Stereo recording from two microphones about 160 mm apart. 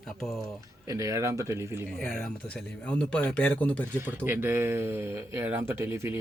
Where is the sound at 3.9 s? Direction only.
15° right (ahead or behind).